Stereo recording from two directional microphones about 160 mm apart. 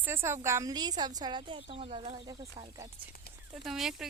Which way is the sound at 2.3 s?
25° right (ahead or behind).